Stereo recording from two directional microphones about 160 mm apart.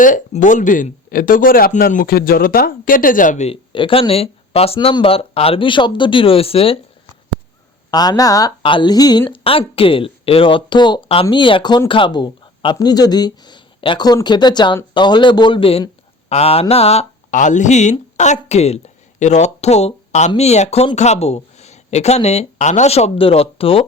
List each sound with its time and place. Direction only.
0.0 s speech: 55° left (ahead or behind); by 6.7 s 35° left (ahead or behind)
7.9 s speech: 25° left (ahead or behind)